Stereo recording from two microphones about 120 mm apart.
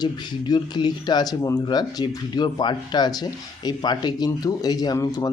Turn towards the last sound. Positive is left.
turn(degrees=30)  # may be behind; listen again after turning